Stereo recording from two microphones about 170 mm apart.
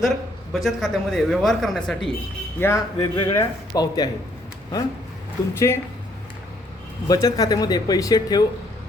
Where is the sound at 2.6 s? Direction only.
15° left (ahead or behind).